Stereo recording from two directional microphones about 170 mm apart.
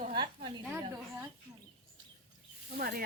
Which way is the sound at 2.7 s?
65° right (ahead or behind).